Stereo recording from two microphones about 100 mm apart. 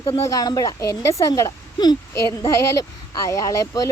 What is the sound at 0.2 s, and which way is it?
Speech, 35° left (ahead or behind).